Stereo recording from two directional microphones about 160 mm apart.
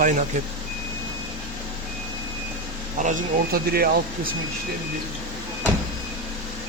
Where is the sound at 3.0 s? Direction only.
50° right (ahead or behind).